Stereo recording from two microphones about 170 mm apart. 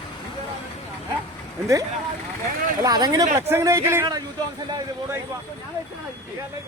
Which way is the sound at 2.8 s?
25° right (ahead or behind).